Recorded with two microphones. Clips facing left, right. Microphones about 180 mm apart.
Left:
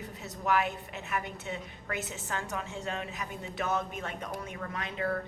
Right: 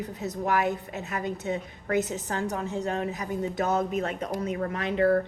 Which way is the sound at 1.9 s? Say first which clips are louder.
Right 10 dB; 40° right (ahead or behind).